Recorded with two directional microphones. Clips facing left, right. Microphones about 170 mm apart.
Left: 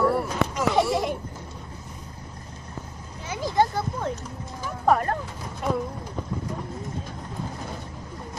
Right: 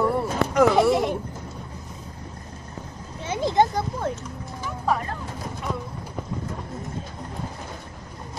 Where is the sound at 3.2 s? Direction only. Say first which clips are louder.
Right 3 dB; 25° right (ahead or behind).